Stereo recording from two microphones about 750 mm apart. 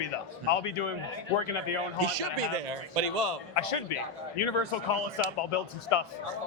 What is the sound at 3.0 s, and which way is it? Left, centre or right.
Speech, right.